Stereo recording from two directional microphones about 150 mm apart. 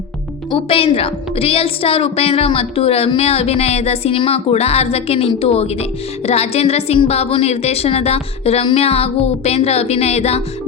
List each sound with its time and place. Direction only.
0.5 s a woman's voice: 40° left (ahead or behind)